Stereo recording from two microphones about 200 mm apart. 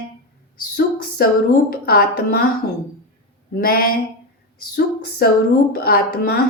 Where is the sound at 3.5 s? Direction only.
45° left (ahead or behind).